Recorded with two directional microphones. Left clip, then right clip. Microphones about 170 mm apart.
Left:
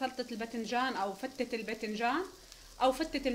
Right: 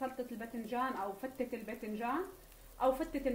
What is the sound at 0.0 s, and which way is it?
Speech, 60° left (ahead or behind).